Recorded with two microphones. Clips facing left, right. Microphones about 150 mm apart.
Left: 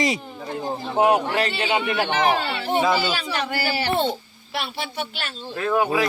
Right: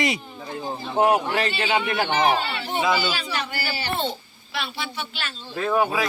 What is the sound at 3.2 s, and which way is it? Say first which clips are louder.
Speech: left 3 dB; 50° left (ahead or behind).